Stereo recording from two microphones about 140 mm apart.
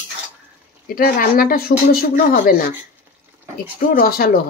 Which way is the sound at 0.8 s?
90° left.